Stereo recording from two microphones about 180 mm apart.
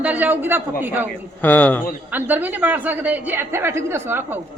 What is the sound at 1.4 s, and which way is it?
Speech, 10° left (ahead or behind).